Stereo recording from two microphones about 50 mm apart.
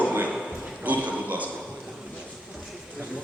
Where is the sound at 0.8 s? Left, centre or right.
Right.